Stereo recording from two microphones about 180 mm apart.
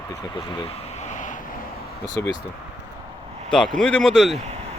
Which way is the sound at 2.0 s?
20° left (ahead or behind).